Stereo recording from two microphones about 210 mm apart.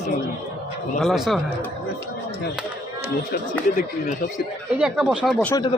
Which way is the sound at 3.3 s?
35° left (ahead or behind).